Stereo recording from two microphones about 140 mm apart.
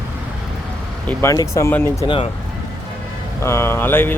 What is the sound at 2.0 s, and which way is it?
Speech, 40° left (ahead or behind).